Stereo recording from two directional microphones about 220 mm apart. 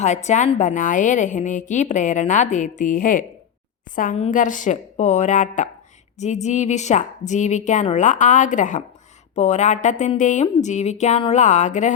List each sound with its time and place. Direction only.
0.0 s a woman's voice: 30° left (ahead or behind)